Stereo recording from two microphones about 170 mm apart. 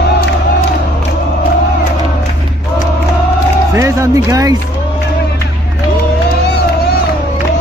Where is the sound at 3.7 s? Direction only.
15° right (ahead or behind).